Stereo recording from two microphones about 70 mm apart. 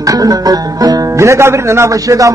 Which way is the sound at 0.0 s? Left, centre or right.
Right.